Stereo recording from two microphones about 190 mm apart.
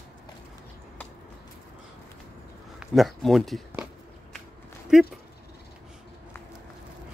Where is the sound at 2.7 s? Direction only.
Centre (ahead or behind).